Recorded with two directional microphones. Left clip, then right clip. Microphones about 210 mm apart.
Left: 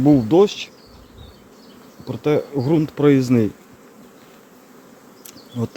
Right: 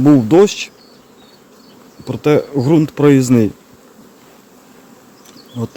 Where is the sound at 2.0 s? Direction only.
30° right (ahead or behind).